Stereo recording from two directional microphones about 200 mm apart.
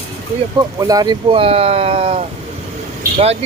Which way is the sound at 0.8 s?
20° right (ahead or behind).